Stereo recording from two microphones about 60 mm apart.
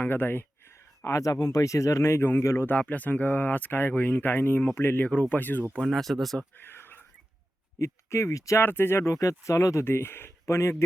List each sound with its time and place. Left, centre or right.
0.1 s speech: left
1.0 s speech: left
2.6 s speech: left
5.8 s speech: centre
6.6 s whispering: left
7.8 s speech: left
8.5 s speech: left
9.0 s speech: left
9.8 s speech: left